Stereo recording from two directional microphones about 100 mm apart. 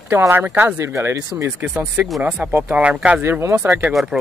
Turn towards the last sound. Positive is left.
turn(degrees=0)  # may be behind; listen again after turning